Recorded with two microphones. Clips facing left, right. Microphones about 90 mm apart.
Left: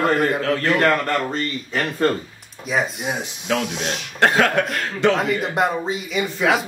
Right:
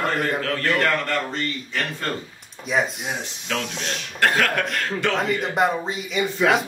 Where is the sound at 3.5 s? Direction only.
15° left (ahead or behind).